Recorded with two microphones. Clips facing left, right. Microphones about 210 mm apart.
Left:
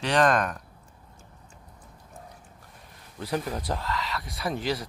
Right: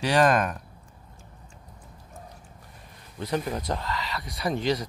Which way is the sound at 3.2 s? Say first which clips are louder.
Right 1 dB; centre (ahead or behind).